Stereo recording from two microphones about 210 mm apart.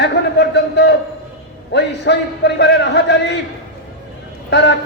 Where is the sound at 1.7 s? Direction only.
55° left (ahead or behind).